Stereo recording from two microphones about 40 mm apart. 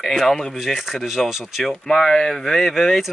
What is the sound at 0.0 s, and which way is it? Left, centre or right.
Speech, centre.